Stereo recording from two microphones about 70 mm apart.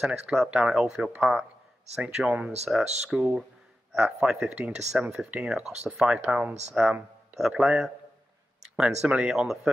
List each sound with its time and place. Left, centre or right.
0.0 s speech: centre